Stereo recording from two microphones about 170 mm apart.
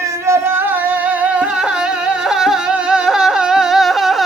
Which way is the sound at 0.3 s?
10° right (ahead or behind).